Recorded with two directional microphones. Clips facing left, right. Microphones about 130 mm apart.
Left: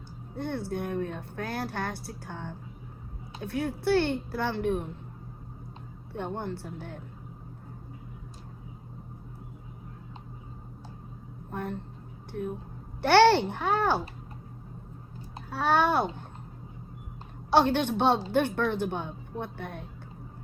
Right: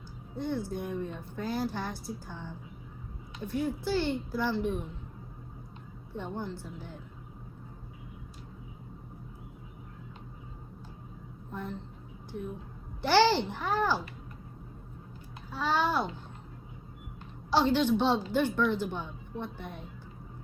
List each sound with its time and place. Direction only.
0.3 s a woman's voice: 60° left (ahead or behind)
6.1 s a woman's voice: 60° left (ahead or behind)
11.5 s a woman's voice: 60° left (ahead or behind)
13.0 s a woman's voice: 60° left (ahead or behind)
15.4 s a child's voice: 60° left (ahead or behind)
17.5 s a woman's voice: 55° left (ahead or behind)